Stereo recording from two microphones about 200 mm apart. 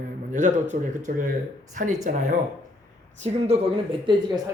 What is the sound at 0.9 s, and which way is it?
Speech, 40° right (ahead or behind).